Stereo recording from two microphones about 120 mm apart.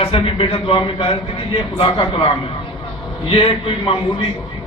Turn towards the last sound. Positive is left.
turn(degrees=50)  # may be behind; listen again after turning